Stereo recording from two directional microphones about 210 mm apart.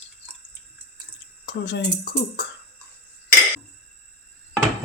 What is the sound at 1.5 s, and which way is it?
Speech, 55° left (ahead or behind).